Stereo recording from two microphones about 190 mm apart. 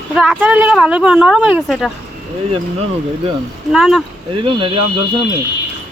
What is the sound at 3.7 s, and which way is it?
Speech, centre (ahead or behind).